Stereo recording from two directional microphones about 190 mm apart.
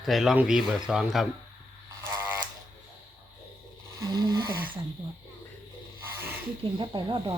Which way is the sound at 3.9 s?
20° right (ahead or behind).